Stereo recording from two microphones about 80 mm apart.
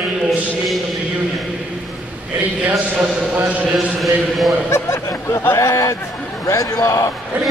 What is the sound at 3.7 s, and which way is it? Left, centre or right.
Speech, centre.